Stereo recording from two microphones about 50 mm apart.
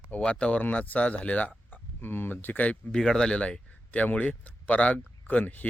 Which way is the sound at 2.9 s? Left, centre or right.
Centre.